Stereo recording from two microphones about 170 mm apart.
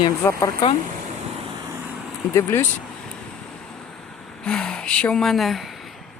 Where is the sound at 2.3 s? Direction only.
15° left (ahead or behind).